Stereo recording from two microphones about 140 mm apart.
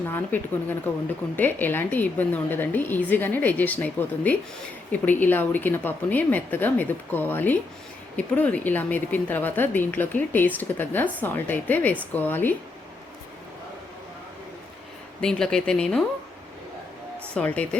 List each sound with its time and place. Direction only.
0.1 s a woman's voice: 15° left (ahead or behind)
15.2 s speech: 5° left (ahead or behind)
17.3 s a woman's voice: 10° left (ahead or behind)